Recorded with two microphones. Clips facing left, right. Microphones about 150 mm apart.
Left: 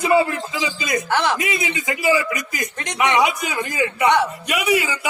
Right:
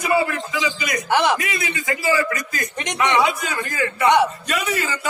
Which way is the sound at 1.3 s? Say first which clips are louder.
Left 1 dB; 20° left (ahead or behind).